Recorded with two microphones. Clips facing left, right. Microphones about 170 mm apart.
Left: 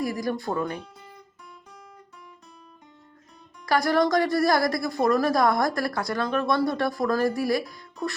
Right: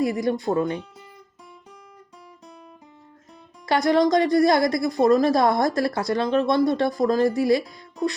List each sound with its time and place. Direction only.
0.0 s a woman's voice: 25° right (ahead or behind)
3.7 s a woman's voice: 20° right (ahead or behind)